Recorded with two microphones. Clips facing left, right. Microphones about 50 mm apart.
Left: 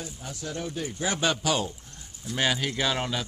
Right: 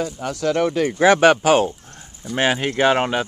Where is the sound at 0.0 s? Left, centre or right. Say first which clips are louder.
Right 15 dB; right.